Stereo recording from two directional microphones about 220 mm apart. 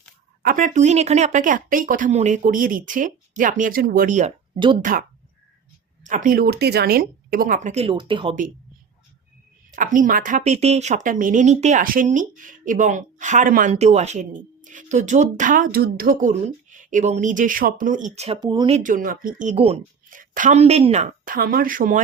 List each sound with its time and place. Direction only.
0.4 s speech: 35° right (ahead or behind)
9.7 s speech: 35° right (ahead or behind); by 18.8 s 20° right (ahead or behind)
18.8 s speech: 35° right (ahead or behind)